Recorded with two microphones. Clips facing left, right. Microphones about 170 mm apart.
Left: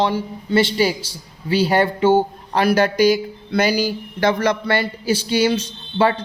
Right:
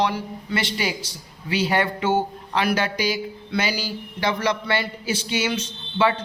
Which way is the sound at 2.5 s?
40° left (ahead or behind).